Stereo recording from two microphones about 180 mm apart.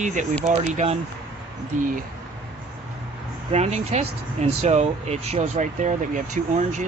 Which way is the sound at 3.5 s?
35° right (ahead or behind).